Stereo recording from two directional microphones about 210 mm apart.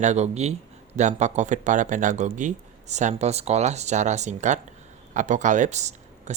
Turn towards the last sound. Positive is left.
turn(degrees=-35)  # may be behind; listen again after turning